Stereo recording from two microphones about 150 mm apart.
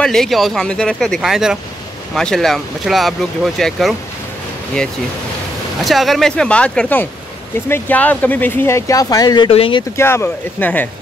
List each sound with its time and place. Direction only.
0.0 s speech: 5° left (ahead or behind)
5.9 s speech: centre (ahead or behind); by 9.8 s 35° left (ahead or behind)
9.9 s speech: 15° left (ahead or behind)